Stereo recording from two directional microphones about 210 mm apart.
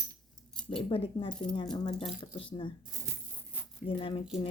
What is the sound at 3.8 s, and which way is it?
Speech, 25° left (ahead or behind).